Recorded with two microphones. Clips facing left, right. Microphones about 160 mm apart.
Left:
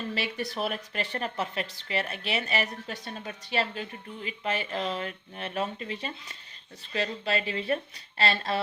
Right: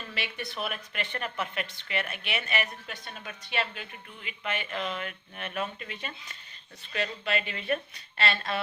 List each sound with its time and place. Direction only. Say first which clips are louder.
0.1 s speech: left 5 dB; 35° left (ahead or behind)